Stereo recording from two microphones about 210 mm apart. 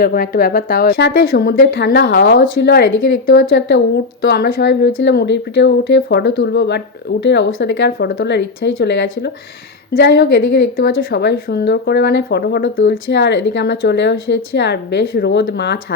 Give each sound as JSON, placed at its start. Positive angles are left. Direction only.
{"t": 0.0, "sound": "a woman's voice", "side_deg": 45}